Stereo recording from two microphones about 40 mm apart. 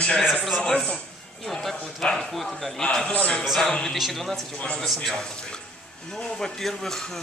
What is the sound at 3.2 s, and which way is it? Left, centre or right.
Speech, left.